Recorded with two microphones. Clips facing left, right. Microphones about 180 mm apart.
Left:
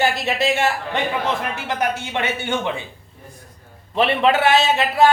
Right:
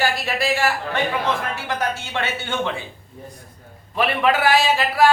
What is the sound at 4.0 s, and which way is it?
Speech, 25° left (ahead or behind).